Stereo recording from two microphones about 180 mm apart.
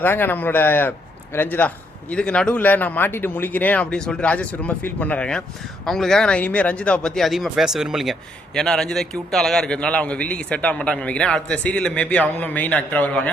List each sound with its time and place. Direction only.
0.0 s a man's voice: 10° left (ahead or behind)